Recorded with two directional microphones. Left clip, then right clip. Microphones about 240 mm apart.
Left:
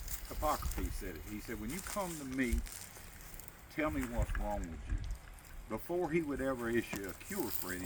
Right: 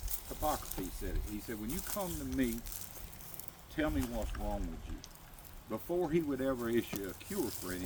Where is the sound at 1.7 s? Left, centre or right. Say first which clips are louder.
Right 1 dB; right.